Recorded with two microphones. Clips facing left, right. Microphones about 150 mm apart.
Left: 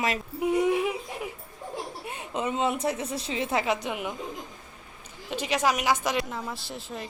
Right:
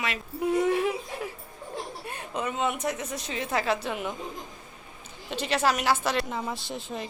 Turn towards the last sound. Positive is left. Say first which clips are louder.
# right 2 dB
turn(degrees=0)  # may be behind; listen again after turning